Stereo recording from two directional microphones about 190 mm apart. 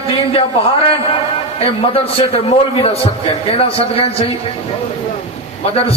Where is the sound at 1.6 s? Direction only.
30° left (ahead or behind).